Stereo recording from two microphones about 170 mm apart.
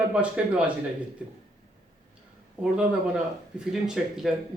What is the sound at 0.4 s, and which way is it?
Speech, 5° right (ahead or behind).